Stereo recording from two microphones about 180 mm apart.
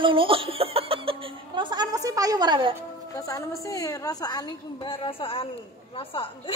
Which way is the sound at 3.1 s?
20° left (ahead or behind).